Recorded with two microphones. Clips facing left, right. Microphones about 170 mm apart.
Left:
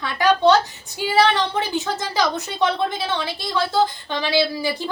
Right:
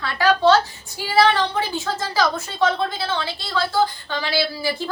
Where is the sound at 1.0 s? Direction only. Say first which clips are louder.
Even; 20° left (ahead or behind).